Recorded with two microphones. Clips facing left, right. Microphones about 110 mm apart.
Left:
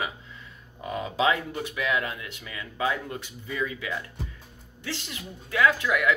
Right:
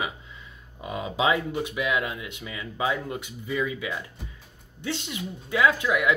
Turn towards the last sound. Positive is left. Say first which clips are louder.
# right 1 dB
turn(degrees=-20)  # may be behind; listen again after turning